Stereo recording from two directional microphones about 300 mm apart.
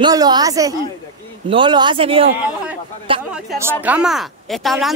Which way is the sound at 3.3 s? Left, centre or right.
Centre.